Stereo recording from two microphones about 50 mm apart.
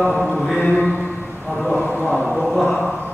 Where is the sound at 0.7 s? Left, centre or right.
Left.